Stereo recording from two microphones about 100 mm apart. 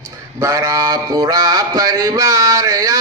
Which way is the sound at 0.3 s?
35° right (ahead or behind).